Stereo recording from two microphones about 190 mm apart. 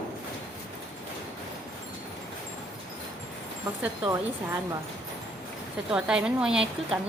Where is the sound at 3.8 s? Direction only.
15° right (ahead or behind).